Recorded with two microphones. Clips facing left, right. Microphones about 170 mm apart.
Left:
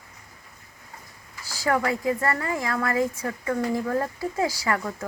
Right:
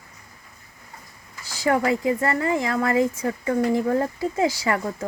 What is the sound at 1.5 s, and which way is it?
Speech, 25° right (ahead or behind).